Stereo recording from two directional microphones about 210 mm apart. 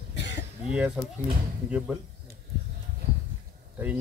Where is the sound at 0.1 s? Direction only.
55° left (ahead or behind).